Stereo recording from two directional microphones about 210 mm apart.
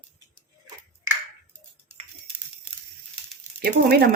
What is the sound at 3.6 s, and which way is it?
Speech, 45° right (ahead or behind).